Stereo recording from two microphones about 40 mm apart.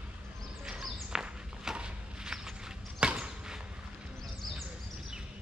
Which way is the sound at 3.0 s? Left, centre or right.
Right.